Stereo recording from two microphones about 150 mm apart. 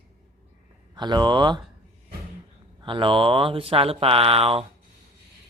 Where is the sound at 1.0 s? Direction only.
30° right (ahead or behind).